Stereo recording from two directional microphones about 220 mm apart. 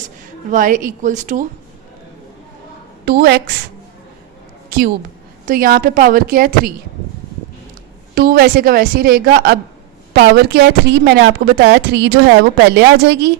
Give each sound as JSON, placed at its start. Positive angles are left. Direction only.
{"t": 0.5, "sound": "a woman's voice", "side_deg": -35}
{"t": 3.1, "sound": "a woman's voice", "side_deg": -45}
{"t": 5.5, "sound": "a woman's voice", "side_deg": -40}
{"t": 8.1, "sound": "a woman's voice", "side_deg": -45}